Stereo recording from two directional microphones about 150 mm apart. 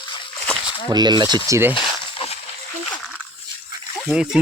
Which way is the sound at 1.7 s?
35° left (ahead or behind).